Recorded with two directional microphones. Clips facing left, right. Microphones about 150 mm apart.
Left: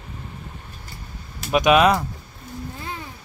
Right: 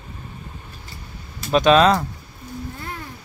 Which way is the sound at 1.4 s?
10° left (ahead or behind).